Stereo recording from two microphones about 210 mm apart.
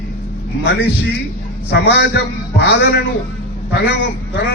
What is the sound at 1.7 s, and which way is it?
A man's voice, 55° left (ahead or behind).